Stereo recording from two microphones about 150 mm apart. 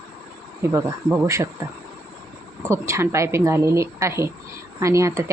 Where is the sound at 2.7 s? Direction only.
20° right (ahead or behind).